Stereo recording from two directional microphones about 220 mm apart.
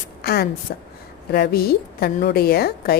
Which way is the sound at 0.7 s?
45° left (ahead or behind).